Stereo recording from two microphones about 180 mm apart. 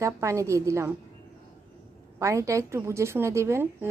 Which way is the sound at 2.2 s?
15° right (ahead or behind).